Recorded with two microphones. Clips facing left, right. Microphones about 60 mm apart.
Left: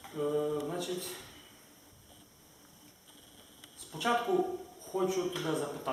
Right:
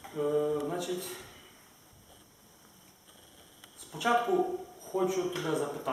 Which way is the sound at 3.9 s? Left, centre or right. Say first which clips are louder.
Right 3 dB; centre.